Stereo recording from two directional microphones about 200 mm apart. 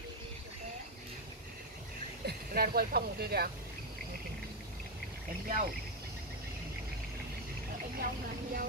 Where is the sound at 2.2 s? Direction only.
50° right (ahead or behind).